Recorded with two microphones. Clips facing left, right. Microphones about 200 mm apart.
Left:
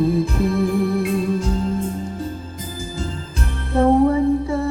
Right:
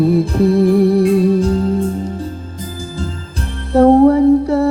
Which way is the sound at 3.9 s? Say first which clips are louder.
Right 6 dB; 45° right (ahead or behind).